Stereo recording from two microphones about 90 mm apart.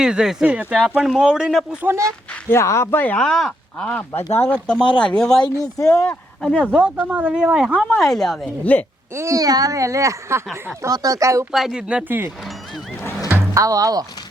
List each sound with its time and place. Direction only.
0.0 s speech: 10° right (ahead or behind)
1.8 s speech: 30° right (ahead or behind)
2.5 s speech: 30° left (ahead or behind)
3.2 s speech: 5° left (ahead or behind)
5.5 s speech: 40° left (ahead or behind)
6.0 s speech: 10° left (ahead or behind)
6.7 s speech: 20° right (ahead or behind); by 8.4 s centre (ahead or behind)
8.7 s speech: 15° left (ahead or behind)
9.1 s speech: 35° right (ahead or behind)
10.8 s speech: 40° right (ahead or behind)
11.5 s speech: 5° right (ahead or behind)
13.5 s speech: 40° right (ahead or behind)